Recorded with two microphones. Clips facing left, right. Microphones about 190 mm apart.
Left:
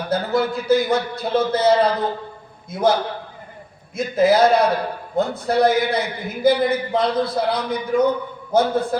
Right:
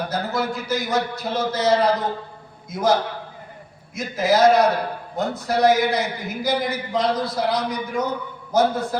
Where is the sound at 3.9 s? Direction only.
55° left (ahead or behind).